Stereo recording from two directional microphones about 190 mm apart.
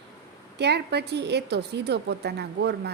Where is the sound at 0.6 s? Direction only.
60° right (ahead or behind).